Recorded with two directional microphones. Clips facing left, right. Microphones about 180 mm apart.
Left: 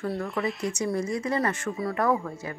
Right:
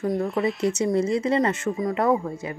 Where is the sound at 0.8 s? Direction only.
25° right (ahead or behind).